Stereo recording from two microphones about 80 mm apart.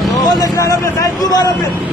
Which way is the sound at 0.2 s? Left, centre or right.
Left.